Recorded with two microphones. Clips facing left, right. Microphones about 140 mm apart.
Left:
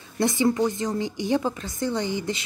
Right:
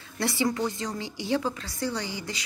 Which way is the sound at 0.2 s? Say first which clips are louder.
Left 5 dB; 20° left (ahead or behind).